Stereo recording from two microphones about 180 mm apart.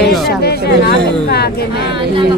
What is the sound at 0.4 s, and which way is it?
Speech, 60° left (ahead or behind).